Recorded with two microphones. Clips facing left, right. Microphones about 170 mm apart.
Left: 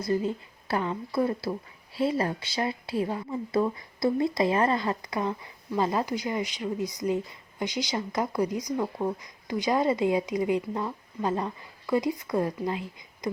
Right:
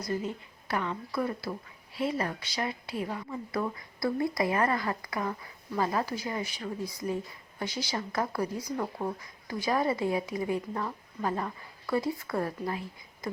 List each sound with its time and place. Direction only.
0.0 s speech: 30° left (ahead or behind)